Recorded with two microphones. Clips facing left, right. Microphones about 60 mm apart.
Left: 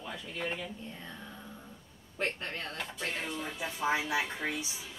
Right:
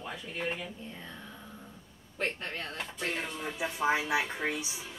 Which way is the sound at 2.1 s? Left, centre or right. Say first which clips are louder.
Even; centre.